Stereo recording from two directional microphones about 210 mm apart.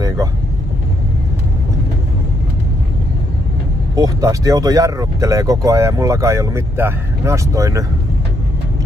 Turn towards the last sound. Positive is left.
turn(degrees=-15)  # may be behind; listen again after turning